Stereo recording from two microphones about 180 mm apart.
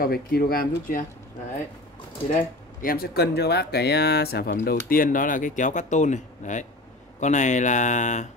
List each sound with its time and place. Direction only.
0.0 s speech: 55° left (ahead or behind)
2.3 s speech: 50° left (ahead or behind)